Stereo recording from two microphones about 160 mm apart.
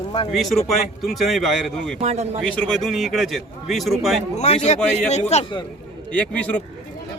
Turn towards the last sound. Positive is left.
turn(degrees=10)  # may be behind; listen again after turning